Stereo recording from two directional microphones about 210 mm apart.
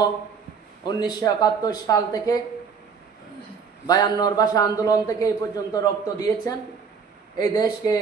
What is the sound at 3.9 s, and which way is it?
A man's voice, 20° left (ahead or behind).